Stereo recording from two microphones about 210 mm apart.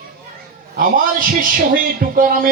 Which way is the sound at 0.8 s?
40° right (ahead or behind).